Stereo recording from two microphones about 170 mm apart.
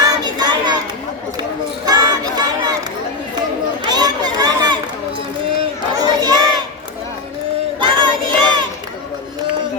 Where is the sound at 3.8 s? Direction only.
25° right (ahead or behind).